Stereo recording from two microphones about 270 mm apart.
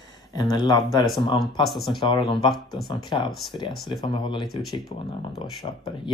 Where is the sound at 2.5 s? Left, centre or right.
Centre.